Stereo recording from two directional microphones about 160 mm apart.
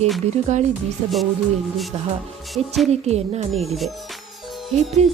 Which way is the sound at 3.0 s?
40° right (ahead or behind).